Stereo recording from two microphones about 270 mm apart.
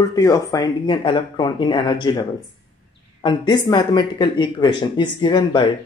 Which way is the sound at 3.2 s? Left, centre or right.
Centre.